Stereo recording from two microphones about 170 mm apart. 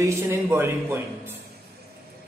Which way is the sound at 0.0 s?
15° right (ahead or behind).